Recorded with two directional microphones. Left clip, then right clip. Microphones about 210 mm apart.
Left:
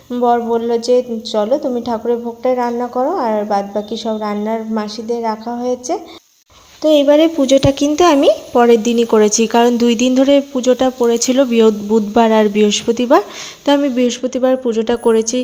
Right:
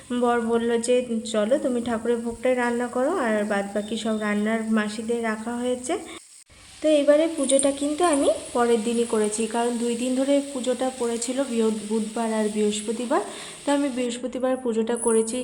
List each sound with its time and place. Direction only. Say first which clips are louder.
0.1 s a woman's voice: left 8 dB; 15° left (ahead or behind)
6.8 s speech: left 8 dB; 35° left (ahead or behind)